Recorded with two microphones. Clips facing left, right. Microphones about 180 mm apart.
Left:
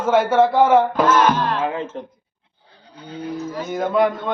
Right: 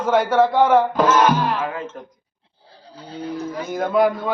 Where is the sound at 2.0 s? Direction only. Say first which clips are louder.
Left 5 dB; 25° left (ahead or behind).